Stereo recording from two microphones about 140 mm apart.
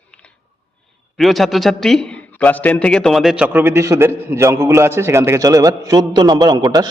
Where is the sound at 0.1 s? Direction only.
5° left (ahead or behind).